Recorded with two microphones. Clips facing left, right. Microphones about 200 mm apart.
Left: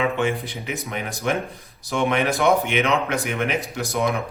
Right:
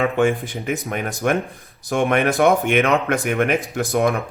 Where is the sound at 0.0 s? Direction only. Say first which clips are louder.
Right 4 dB; 50° right (ahead or behind).